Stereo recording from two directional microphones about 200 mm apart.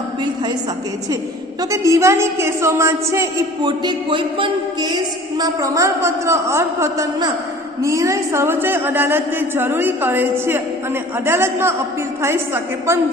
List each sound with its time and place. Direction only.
1.7 s a man's voice: 15° right (ahead or behind)